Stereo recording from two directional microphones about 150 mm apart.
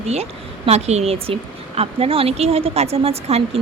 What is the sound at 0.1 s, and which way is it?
A woman's voice, 45° right (ahead or behind).